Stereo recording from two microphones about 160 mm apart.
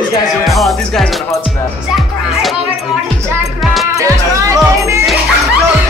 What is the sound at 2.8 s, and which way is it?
Music, centre (ahead or behind).